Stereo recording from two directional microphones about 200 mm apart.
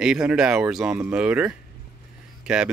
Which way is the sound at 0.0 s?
5° right (ahead or behind).